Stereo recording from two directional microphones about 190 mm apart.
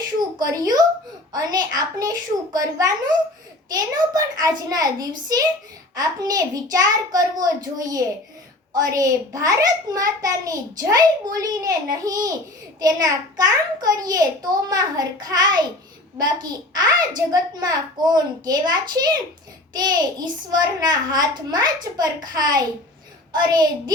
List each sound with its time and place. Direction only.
0.3 s a child's voice: 20° right (ahead or behind)